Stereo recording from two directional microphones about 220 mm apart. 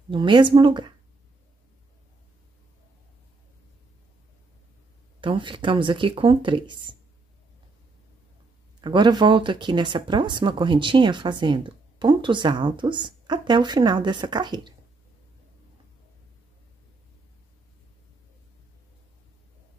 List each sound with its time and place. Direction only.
0.1 s speech: 20° right (ahead or behind)
5.2 s speech: 20° right (ahead or behind)
8.8 s speech: 20° right (ahead or behind)